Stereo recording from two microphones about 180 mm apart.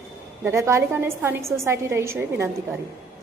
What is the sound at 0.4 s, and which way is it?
A woman's voice, 15° right (ahead or behind).